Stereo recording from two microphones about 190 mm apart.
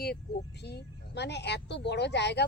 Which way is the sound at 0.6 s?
60° left (ahead or behind).